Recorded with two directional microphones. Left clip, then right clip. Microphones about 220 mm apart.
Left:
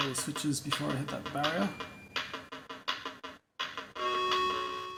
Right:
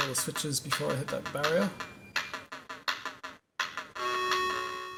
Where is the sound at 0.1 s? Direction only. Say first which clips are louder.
Right 1 dB; 20° right (ahead or behind).